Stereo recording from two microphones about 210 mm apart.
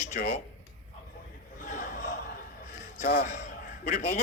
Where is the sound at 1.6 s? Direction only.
40° left (ahead or behind).